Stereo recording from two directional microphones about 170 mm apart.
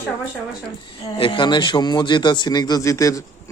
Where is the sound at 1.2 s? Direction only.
30° left (ahead or behind).